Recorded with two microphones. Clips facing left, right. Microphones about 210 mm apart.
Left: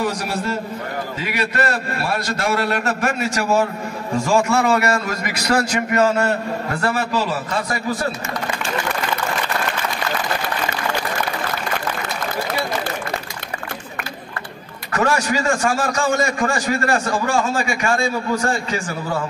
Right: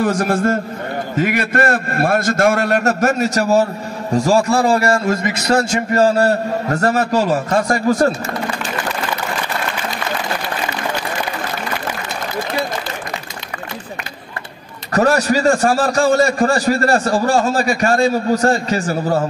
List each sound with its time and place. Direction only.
0.0 s a man's voice: 50° right (ahead or behind)
14.9 s a man's voice: 40° right (ahead or behind)